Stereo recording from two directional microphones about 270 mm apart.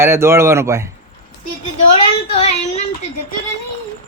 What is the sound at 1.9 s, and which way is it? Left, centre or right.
Speech, left.